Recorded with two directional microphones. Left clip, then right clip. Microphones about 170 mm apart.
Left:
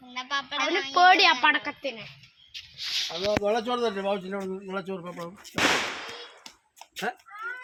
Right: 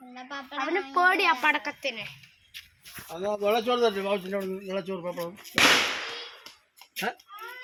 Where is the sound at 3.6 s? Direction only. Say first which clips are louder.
Right 3 dB; 15° left (ahead or behind).